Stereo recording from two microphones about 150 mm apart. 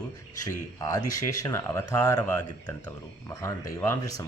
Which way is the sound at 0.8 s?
25° left (ahead or behind).